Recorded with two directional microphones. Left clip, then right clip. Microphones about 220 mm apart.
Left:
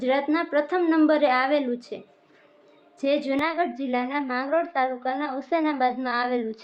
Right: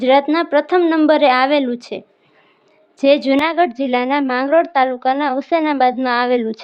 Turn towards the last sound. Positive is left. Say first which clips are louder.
# right 10 dB
turn(degrees=-35)  # may be behind; listen again after turning